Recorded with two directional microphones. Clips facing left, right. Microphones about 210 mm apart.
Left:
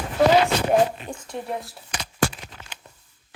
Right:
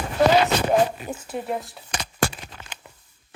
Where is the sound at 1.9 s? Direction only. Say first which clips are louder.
Left 1 dB; 50° right (ahead or behind).